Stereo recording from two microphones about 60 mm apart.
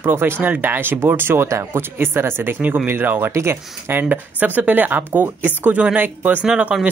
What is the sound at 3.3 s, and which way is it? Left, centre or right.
Speech, right.